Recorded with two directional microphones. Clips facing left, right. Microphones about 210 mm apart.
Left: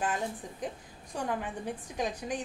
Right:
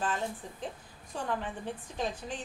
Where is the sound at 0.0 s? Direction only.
15° left (ahead or behind).